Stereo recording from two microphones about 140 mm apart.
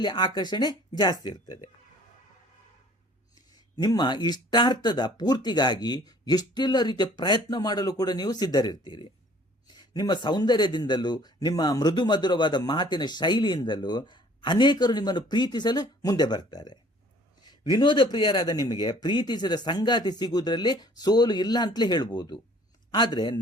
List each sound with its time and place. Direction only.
0.0 s speech: 35° left (ahead or behind)
3.8 s speech: 30° left (ahead or behind)